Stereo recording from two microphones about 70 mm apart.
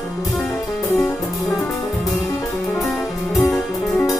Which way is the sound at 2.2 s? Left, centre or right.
Centre.